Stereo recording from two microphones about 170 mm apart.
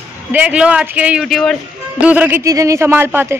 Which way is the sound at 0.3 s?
10° right (ahead or behind).